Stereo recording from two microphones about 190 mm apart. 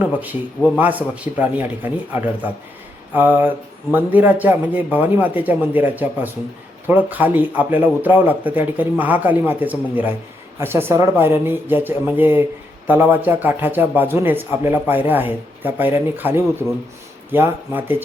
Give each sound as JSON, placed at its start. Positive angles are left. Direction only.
{"t": 0.0, "sound": "speech", "side_deg": -10}